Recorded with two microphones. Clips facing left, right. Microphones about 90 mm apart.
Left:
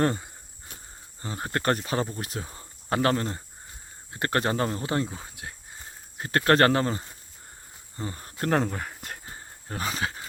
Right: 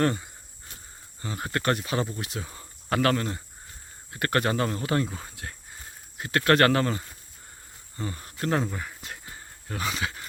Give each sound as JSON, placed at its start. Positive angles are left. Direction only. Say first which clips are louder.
{"t": 0.0, "sound": "speech", "louder": "even", "side_deg": 30}
{"t": 6.1, "sound": "speech", "louder": "left 1 dB", "side_deg": 35}
{"t": 8.6, "sound": "speech", "louder": "left 2 dB", "side_deg": 50}
{"t": 9.2, "sound": "a sound", "louder": "left 1 dB", "side_deg": 35}